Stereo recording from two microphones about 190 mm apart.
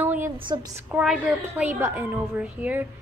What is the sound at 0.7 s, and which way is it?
Speech, 5° right (ahead or behind).